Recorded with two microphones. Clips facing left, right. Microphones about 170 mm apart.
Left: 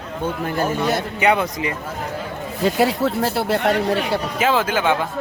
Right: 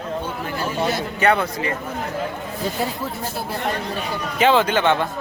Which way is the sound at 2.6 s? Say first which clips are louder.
Left 8 dB; 75° left (ahead or behind).